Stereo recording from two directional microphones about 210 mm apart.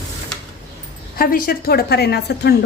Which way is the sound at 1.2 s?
45° left (ahead or behind).